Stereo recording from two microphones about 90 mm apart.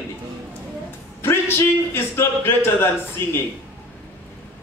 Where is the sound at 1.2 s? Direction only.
25° left (ahead or behind).